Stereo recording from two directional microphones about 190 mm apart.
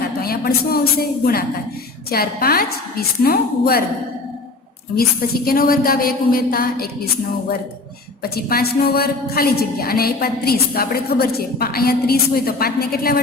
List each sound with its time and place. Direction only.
0.2 s a sound: 55° left (ahead or behind)
1.2 s a woman's voice: 55° left (ahead or behind)
5.5 s a woman's voice: 50° left (ahead or behind)
8.2 s a woman's voice: 55° left (ahead or behind)